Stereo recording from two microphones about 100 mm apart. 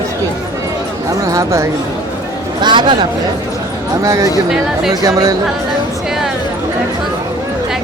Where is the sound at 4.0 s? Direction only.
35° right (ahead or behind).